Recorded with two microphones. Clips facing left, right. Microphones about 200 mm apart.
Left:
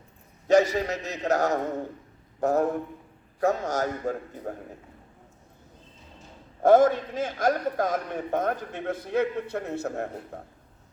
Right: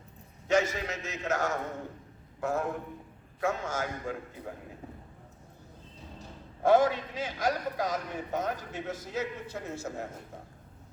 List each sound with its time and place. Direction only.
0.4 s a man's voice: 35° left (ahead or behind)
6.6 s a man's voice: 50° left (ahead or behind)